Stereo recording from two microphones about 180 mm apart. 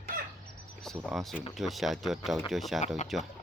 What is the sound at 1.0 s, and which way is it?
Speech, centre (ahead or behind).